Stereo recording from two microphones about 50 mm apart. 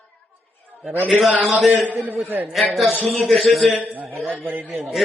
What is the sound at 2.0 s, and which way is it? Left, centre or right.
Speech, right.